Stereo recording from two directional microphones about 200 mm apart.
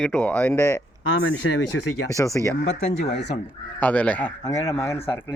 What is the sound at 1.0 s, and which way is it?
Speech, 75° left (ahead or behind).